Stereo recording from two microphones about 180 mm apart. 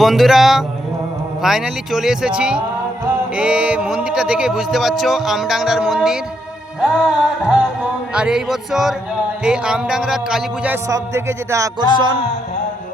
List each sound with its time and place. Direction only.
0.0 s speech: centre (ahead or behind)
10.8 s music: 15° right (ahead or behind)